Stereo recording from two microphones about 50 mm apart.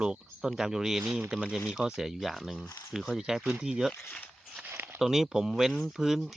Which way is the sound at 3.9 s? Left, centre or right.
Left.